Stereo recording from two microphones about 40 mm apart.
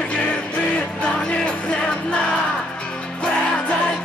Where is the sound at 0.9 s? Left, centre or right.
Left.